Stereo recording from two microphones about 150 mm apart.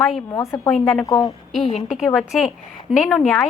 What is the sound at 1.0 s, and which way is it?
Speech, 20° left (ahead or behind).